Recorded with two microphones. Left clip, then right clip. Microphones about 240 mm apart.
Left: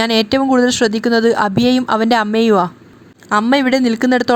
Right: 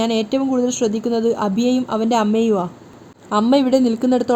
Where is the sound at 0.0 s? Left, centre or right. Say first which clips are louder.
Left 5 dB; left.